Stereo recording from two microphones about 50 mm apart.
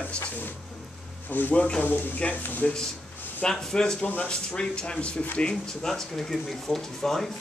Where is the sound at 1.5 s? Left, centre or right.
Left.